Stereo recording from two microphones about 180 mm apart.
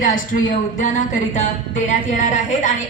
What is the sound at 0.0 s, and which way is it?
A woman's voice, 50° left (ahead or behind).